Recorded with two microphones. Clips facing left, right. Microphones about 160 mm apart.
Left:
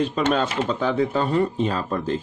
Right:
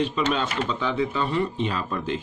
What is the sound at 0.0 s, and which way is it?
Speech, 50° left (ahead or behind).